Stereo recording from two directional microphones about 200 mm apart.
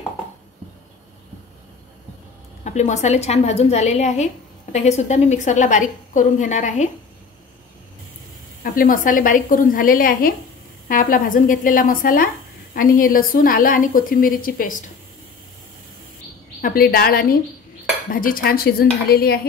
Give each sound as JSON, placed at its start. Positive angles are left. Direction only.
{"t": 2.6, "sound": "a woman's voice", "side_deg": 35}
{"t": 8.7, "sound": "a woman's voice", "side_deg": 45}
{"t": 16.6, "sound": "a woman's voice", "side_deg": 50}